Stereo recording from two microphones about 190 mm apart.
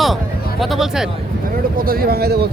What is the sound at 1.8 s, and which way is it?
Speech, 50° right (ahead or behind).